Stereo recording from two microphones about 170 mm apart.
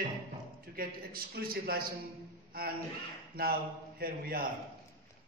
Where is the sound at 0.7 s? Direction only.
60° right (ahead or behind).